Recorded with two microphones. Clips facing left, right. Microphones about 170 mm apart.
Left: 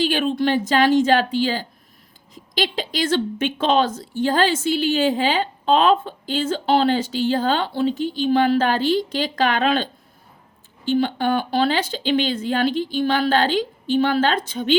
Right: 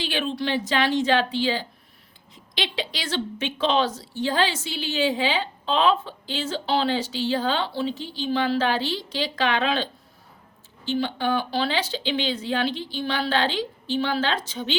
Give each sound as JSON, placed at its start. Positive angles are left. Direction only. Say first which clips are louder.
{"t": 0.0, "sound": "a woman's voice", "louder": "left 7 dB", "side_deg": 45}